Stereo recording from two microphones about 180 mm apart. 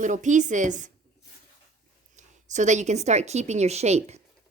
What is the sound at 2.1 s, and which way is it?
A woman's voice, 40° right (ahead or behind).